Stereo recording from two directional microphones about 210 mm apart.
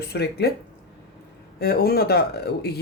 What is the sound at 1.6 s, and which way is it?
Speech, 45° left (ahead or behind).